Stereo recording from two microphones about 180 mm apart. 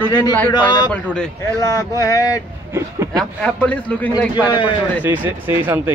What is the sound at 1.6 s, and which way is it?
Speech, 20° left (ahead or behind).